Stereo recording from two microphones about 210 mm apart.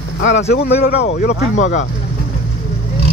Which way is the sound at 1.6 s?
35° left (ahead or behind).